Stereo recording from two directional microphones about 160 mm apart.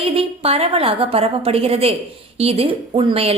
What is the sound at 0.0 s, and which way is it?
A woman's voice, 40° right (ahead or behind).